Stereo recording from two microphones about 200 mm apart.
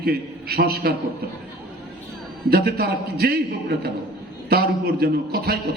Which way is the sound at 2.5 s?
50° right (ahead or behind).